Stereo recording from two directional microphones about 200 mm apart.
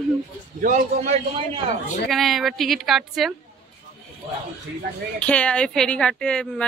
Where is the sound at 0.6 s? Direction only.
40° right (ahead or behind).